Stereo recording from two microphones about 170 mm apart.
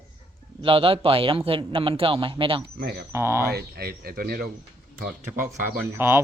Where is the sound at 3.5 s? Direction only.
65° right (ahead or behind).